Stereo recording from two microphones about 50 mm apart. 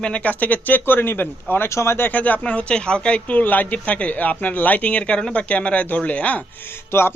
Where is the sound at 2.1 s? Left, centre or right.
Left.